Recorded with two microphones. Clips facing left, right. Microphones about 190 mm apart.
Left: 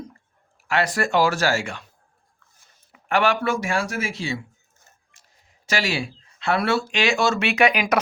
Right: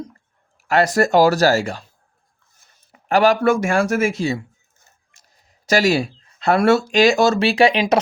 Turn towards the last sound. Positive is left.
turn(degrees=-30)  # may be behind; listen again after turning